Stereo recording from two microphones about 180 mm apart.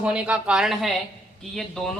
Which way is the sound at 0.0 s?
5° right (ahead or behind).